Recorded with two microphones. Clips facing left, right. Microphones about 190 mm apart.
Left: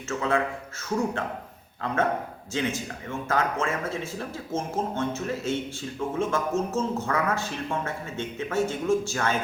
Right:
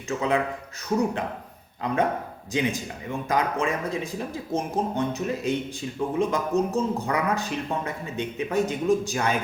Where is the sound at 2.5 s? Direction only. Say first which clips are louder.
Right 3 dB; 15° right (ahead or behind).